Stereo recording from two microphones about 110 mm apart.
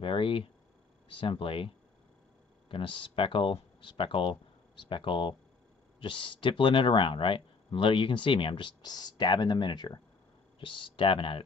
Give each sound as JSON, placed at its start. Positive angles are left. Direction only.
{"t": 0.0, "sound": "speech", "side_deg": 55}
{"t": 2.7, "sound": "speech", "side_deg": 50}